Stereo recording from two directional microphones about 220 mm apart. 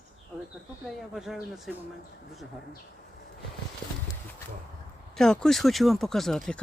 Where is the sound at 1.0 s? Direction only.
Centre (ahead or behind).